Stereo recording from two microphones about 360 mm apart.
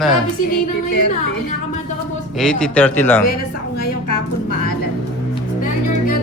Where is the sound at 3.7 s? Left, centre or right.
Left.